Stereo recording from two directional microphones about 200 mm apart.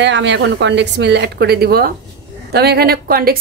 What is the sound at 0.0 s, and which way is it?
A woman's voice, 60° right (ahead or behind).